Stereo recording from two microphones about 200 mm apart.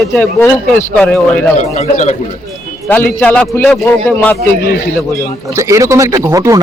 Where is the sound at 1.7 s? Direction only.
35° left (ahead or behind).